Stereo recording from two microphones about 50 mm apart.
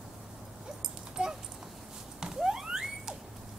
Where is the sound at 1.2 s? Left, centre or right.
Centre.